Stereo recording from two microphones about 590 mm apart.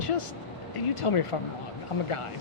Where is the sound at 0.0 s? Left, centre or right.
Left.